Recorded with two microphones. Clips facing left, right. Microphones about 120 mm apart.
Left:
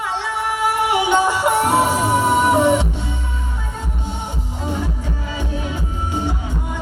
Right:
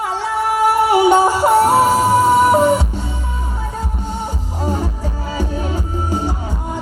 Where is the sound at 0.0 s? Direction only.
40° right (ahead or behind).